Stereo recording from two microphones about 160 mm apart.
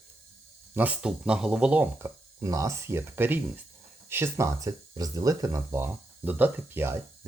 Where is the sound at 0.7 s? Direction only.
10° right (ahead or behind).